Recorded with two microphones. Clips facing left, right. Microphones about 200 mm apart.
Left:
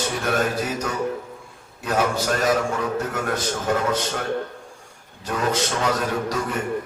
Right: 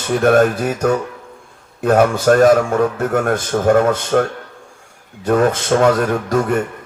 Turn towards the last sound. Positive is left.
turn(degrees=-50)  # may be behind; listen again after turning